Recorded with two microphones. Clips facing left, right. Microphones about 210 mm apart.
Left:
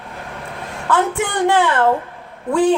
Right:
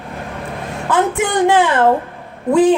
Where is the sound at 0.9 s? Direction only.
15° right (ahead or behind).